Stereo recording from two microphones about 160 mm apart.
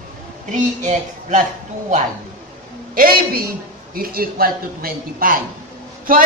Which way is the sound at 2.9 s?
65° right (ahead or behind).